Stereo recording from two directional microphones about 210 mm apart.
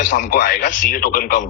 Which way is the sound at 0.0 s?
40° left (ahead or behind).